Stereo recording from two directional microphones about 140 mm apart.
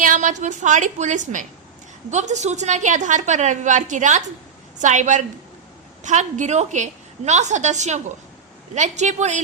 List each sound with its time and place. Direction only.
0.0 s a woman's voice: 65° right (ahead or behind)